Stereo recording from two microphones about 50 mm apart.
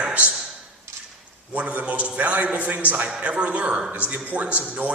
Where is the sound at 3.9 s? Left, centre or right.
Right.